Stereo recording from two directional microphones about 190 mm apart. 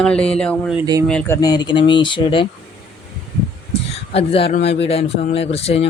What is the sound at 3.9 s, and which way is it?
A man's voice, 30° left (ahead or behind).